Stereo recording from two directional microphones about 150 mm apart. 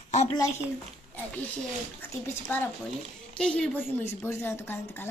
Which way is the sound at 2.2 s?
15° left (ahead or behind).